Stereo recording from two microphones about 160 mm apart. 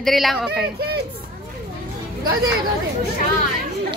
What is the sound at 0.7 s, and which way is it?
Speech, 80° right.